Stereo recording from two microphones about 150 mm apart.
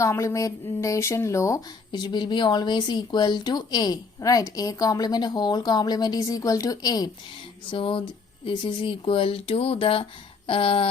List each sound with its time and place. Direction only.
0.0 s speech: 20° left (ahead or behind)
7.7 s speech: 35° left (ahead or behind)